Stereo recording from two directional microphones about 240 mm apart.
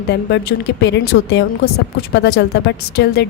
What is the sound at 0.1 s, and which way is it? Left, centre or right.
A woman's voice, left.